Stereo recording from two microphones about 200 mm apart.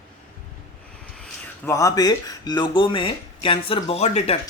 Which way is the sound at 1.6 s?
15° left (ahead or behind).